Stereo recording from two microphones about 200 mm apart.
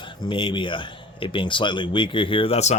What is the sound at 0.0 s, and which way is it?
Speech, 25° left (ahead or behind).